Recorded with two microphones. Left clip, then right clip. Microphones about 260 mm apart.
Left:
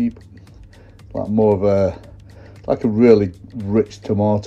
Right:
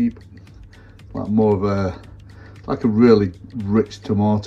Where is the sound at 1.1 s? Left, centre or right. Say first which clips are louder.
Left 2 dB; centre.